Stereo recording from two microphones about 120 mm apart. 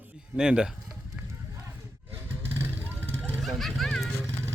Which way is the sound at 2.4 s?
20° right (ahead or behind).